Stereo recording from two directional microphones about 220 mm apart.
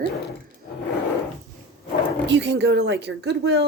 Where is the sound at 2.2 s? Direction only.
55° right (ahead or behind).